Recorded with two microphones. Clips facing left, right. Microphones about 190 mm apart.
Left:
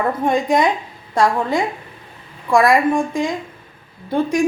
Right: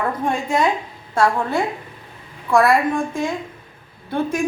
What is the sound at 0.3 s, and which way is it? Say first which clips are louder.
A woman's voice: left 4 dB; 15° left (ahead or behind).